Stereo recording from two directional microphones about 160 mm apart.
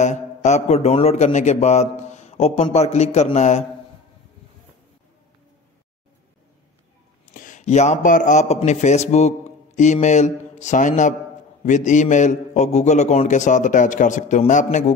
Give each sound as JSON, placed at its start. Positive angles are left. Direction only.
{"t": 0.0, "sound": "a man's voice", "side_deg": 45}
{"t": 7.3, "sound": "a man's voice", "side_deg": 50}